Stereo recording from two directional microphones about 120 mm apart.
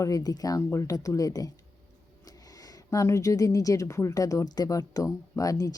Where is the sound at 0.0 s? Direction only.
30° left (ahead or behind).